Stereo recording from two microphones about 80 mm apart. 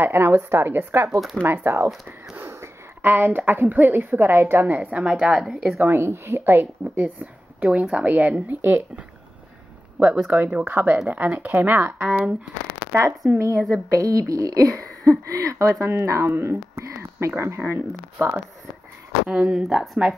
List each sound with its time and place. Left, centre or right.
0.0 s a woman's voice: right
5.2 s speech: centre
5.8 s a woman's voice: right
9.9 s a woman's voice: centre
12.1 s speech: centre
12.9 s a woman's voice: right
19.2 s speech: centre